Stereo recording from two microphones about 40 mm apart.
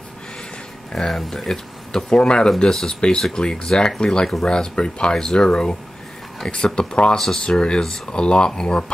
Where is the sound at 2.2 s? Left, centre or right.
Left.